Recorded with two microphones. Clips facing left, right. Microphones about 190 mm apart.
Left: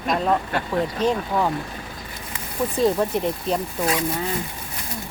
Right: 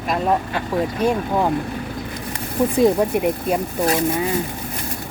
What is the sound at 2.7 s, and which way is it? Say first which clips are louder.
Speech: right 3 dB; 10° right (ahead or behind).